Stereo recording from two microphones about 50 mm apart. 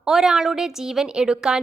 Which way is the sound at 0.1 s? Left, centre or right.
Centre.